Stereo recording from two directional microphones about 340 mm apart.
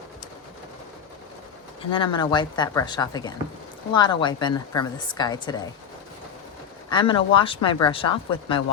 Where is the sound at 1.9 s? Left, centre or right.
Centre.